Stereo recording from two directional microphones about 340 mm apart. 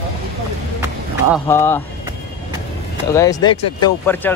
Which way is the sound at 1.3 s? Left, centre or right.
Centre.